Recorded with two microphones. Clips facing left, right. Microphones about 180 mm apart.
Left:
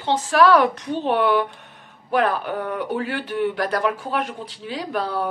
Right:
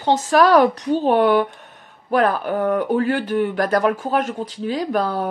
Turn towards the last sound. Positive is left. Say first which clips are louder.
# right 4 dB
turn(degrees=-45)  # may be behind; listen again after turning